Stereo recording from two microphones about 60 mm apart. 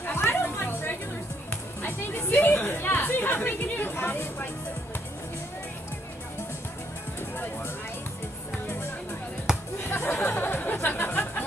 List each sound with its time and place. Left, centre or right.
0.0 s chatter: left
8.6 s music: left
9.5 s basketball bounce: centre
9.8 s music: left